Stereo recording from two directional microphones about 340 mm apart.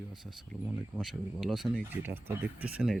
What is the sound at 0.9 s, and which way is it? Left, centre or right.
Speech, centre.